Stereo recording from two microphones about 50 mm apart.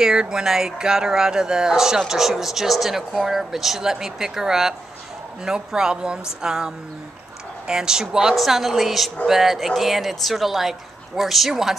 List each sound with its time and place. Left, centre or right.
0.0 s a woman's voice: centre